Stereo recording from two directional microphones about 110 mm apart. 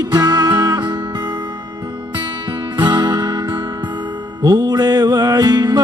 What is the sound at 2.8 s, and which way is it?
Music, 40° right (ahead or behind).